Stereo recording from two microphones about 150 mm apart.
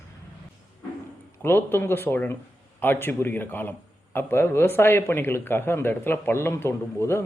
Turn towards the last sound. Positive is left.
turn(degrees=15)  # may be behind; listen again after turning